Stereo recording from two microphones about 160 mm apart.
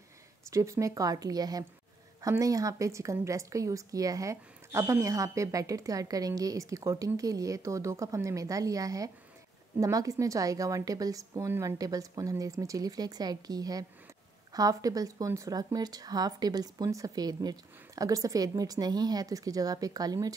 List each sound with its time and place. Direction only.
0.5 s a woman's voice: 20° right (ahead or behind)